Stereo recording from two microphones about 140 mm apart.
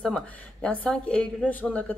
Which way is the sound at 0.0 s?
5° left (ahead or behind).